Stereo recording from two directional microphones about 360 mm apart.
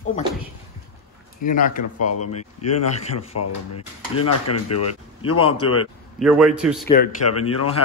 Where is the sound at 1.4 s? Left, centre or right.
Left.